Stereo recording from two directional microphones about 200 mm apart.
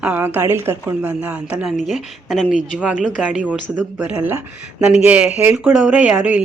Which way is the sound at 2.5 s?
40° left (ahead or behind).